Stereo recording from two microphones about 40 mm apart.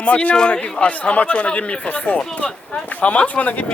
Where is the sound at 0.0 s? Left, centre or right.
Left.